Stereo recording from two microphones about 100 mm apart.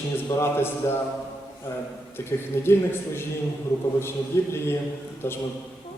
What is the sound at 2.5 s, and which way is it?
Speech, 25° left (ahead or behind).